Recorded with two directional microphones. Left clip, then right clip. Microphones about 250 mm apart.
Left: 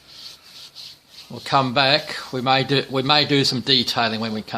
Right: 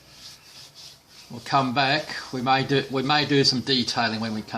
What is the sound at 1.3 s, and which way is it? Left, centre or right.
Speech, left.